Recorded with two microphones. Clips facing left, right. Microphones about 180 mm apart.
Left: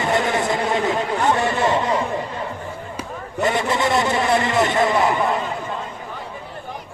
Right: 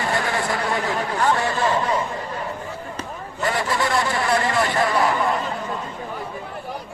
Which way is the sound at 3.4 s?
20° left (ahead or behind).